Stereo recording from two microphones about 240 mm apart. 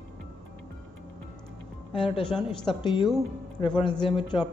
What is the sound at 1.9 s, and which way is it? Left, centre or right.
A man's voice, left.